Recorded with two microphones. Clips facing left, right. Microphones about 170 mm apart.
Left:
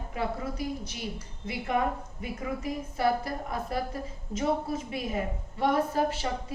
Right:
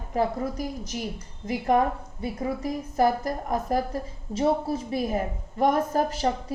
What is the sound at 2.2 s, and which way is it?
A woman's voice, 35° right (ahead or behind).